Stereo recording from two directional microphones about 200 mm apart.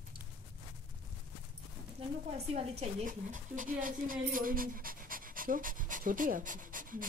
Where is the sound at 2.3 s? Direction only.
30° right (ahead or behind).